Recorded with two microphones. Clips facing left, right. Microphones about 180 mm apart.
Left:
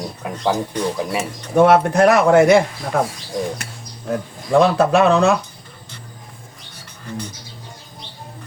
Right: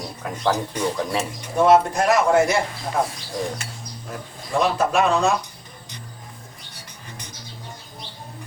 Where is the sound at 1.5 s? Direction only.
60° left (ahead or behind).